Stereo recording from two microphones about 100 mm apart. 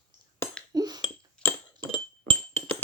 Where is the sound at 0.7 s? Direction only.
40° right (ahead or behind).